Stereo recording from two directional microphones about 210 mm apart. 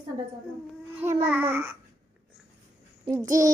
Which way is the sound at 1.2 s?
10° right (ahead or behind).